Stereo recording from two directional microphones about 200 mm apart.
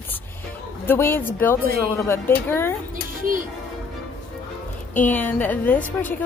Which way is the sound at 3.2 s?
45° right (ahead or behind).